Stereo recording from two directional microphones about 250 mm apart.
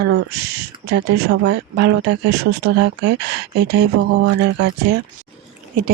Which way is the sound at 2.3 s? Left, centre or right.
Right.